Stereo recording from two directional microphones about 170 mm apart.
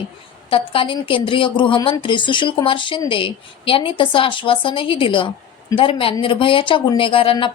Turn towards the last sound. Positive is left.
turn(degrees=30)  # may be behind; listen again after turning